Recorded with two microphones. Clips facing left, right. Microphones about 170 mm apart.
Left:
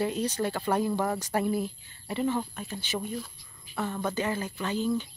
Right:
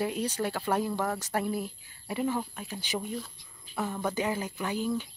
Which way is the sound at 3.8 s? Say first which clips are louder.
Even; 10° right (ahead or behind).